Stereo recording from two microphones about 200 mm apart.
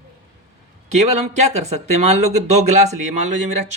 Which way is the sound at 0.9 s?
35° right (ahead or behind).